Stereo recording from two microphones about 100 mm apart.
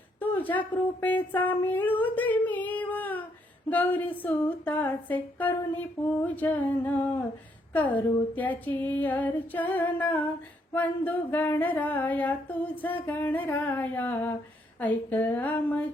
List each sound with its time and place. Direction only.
0.2 s female singing: 15° left (ahead or behind)